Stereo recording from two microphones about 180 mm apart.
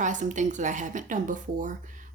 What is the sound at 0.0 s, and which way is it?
Speech, 45° right (ahead or behind).